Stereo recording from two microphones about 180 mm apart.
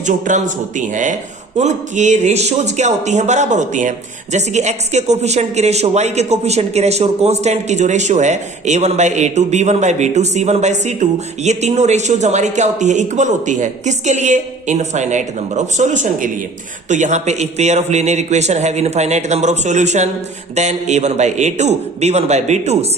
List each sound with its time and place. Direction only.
0.0 s a man's voice: 45° right (ahead or behind)